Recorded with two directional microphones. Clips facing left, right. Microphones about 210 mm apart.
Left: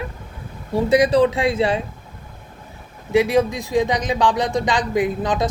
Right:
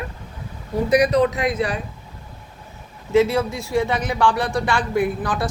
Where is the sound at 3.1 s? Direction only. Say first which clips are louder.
Left 1 dB; 15° left (ahead or behind).